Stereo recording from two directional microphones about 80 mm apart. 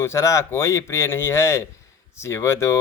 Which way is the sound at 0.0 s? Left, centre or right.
Left.